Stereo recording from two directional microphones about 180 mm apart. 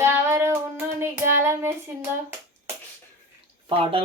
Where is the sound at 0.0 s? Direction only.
15° right (ahead or behind).